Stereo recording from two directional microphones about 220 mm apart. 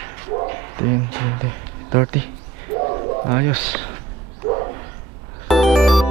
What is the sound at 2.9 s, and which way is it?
Speech, 15° right (ahead or behind).